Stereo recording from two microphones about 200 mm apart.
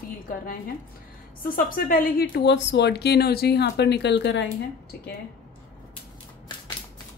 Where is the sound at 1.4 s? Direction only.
45° left (ahead or behind); by 4.5 s 60° left (ahead or behind).